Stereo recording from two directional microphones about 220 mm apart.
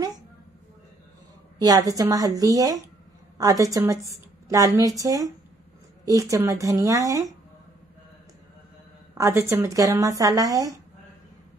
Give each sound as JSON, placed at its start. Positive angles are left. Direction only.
{"t": 1.6, "sound": "speech", "side_deg": -15}
{"t": 9.1, "sound": "speech", "side_deg": -10}